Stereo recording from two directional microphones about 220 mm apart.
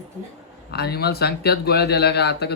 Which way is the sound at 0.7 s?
45° left (ahead or behind).